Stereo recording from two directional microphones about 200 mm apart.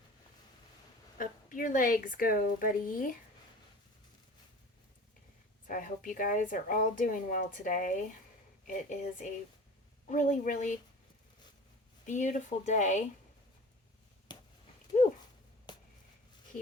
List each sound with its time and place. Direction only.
1.2 s speech: 45° left (ahead or behind)
5.6 s a woman's voice: 40° left (ahead or behind)
12.0 s a woman's voice: 40° left (ahead or behind)
14.3 s a sound: 20° left (ahead or behind)